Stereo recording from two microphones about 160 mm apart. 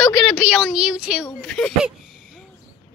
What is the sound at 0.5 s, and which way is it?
A child's voice, 5° right (ahead or behind).